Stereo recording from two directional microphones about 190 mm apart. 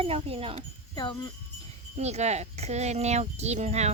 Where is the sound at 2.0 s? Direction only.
35° right (ahead or behind).